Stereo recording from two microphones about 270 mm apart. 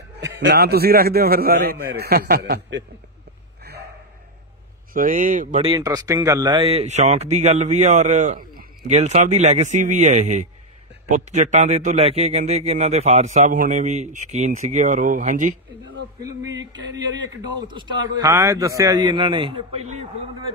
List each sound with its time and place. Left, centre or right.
0.4 s a man's voice: right
3.7 s gasp: right
4.9 s a man's voice: right
16.7 s a man's voice: centre